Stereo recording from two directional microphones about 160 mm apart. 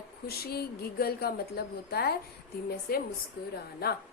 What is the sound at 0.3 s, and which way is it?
Speech, 75° left (ahead or behind).